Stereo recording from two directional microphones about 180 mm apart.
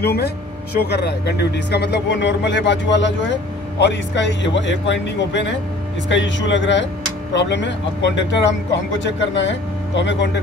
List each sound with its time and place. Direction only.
0.0 s speech: 60° left (ahead or behind); by 10.3 s 80° left